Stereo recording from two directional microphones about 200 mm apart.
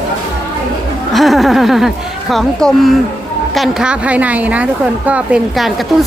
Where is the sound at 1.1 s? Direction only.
Centre (ahead or behind).